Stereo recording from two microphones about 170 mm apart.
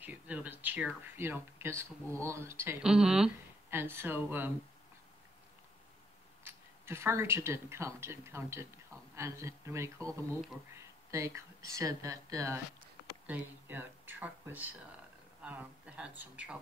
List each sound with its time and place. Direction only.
0.0 s speech: 10° right (ahead or behind)
2.8 s speech: 5° right (ahead or behind)
3.7 s speech: 15° right (ahead or behind)
6.4 s speech: 15° right (ahead or behind)
15.4 s a sound: 5° right (ahead or behind)
16.2 s speech: 10° right (ahead or behind)